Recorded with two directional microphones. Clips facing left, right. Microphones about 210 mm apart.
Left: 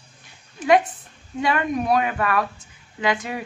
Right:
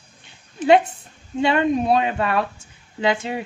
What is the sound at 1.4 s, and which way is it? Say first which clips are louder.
Speech: right 4 dB; 25° right (ahead or behind).